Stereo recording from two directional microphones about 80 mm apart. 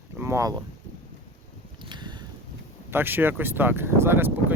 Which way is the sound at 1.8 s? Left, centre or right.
Right.